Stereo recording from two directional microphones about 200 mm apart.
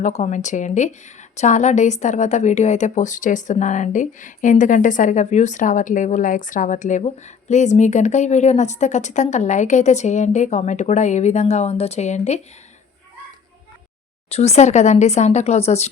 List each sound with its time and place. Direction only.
0.0 s a woman's voice: 35° left (ahead or behind)
14.3 s a woman's voice: 30° left (ahead or behind)